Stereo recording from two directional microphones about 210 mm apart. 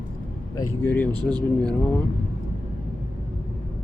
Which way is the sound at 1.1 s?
20° right (ahead or behind).